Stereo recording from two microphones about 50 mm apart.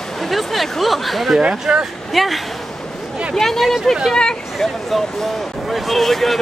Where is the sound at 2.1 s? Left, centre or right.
Centre.